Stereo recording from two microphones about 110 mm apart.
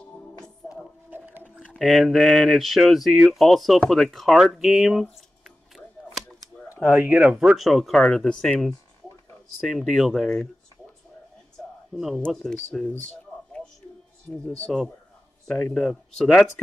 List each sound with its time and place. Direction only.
0.6 s a sound: 15° left (ahead or behind)
1.1 s dog: 15° right (ahead or behind)
1.6 s speech: 5° left (ahead or behind)
6.8 s speech: 15° right (ahead or behind); by 10.5 s 5° left (ahead or behind)
12.3 s speech: centre (ahead or behind)
14.4 s speech: 5° left (ahead or behind)